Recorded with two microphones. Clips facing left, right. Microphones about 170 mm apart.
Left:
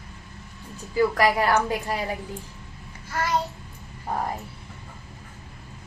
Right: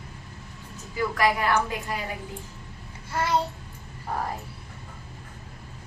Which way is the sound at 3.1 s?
25° right (ahead or behind).